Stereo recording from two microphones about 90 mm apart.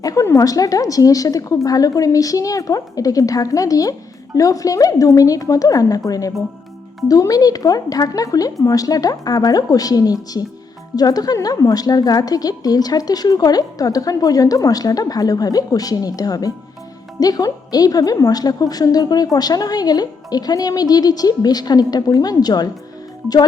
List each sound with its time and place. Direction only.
0.0 s a woman's voice: 40° left (ahead or behind)